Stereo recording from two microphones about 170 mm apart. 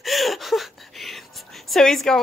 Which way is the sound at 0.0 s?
Centre (ahead or behind).